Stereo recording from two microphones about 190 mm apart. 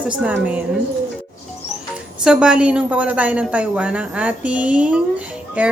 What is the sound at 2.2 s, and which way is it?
A woman's voice, 5° right (ahead or behind).